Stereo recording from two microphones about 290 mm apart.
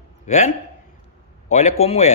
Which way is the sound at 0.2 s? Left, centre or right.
Left.